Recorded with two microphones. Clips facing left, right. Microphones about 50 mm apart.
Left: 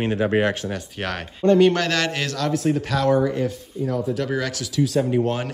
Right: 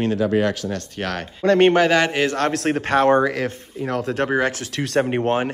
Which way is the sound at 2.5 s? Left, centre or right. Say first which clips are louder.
Right 3 dB; right.